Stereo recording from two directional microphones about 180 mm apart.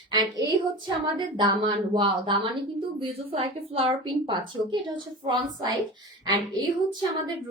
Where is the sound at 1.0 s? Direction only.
25° right (ahead or behind).